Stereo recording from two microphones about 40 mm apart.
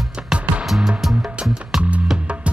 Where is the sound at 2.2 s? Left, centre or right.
Right.